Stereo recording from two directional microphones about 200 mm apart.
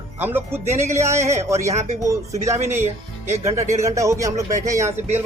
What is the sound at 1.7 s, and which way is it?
Speech, 35° right (ahead or behind).